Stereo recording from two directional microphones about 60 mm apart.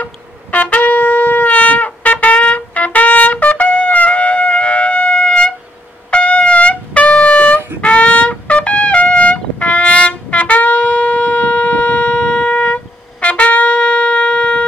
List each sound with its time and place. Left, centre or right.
0.0 s shofar: left
6.0 s brass instrument: centre